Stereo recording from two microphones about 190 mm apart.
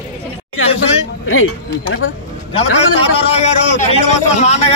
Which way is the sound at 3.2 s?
35° left (ahead or behind).